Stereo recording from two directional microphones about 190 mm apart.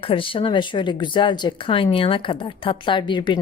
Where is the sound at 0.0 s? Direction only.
25° left (ahead or behind).